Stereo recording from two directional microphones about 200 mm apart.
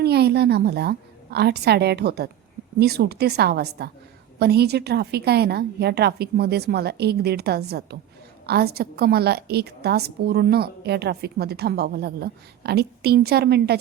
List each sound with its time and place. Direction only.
0.0 s a woman's voice: 55° right (ahead or behind)